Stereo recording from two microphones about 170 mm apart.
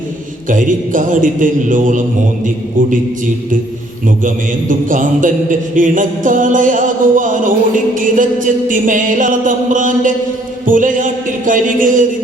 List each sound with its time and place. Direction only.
0.4 s music: 50° right (ahead or behind)
4.7 s music: 50° right (ahead or behind)